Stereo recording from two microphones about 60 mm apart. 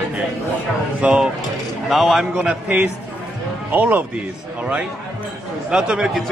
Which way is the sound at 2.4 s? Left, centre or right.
Right.